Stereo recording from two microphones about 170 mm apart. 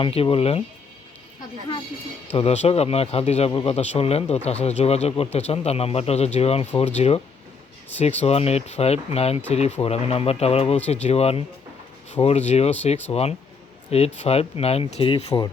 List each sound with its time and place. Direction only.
0.0 s speech: 35° left (ahead or behind)
2.3 s speech: 40° left (ahead or behind)